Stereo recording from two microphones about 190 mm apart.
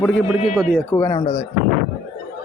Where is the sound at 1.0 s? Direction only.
20° left (ahead or behind).